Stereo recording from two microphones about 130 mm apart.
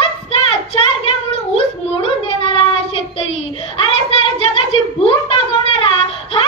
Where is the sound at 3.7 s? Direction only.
45° left (ahead or behind).